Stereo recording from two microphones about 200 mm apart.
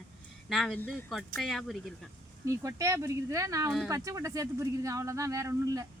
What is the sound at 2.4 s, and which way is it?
Speech, 15° right (ahead or behind).